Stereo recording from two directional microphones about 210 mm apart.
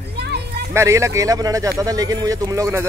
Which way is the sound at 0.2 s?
50° right (ahead or behind).